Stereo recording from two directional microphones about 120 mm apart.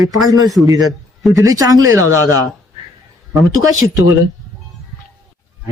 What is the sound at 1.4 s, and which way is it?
Speech, 30° right (ahead or behind).